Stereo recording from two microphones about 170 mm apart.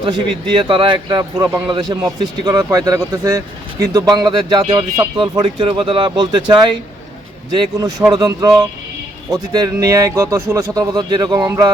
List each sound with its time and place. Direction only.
0.0 s a man's voice: 30° right (ahead or behind)